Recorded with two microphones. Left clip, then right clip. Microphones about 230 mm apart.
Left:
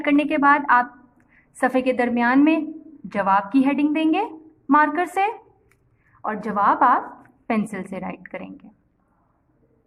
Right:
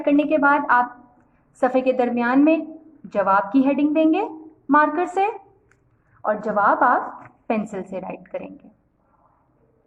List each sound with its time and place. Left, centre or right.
0.0 s a woman's voice: left